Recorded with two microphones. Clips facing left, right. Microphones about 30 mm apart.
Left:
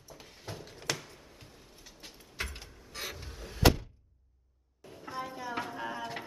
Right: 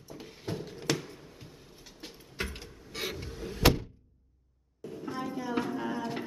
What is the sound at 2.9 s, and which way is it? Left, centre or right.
Vehicle, right.